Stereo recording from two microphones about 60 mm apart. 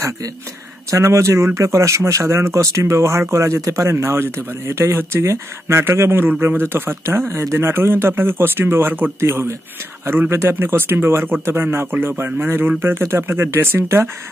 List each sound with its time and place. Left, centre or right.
0.8 s speech: right